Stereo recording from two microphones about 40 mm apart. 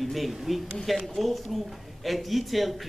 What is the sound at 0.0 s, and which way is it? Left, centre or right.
Speech, centre.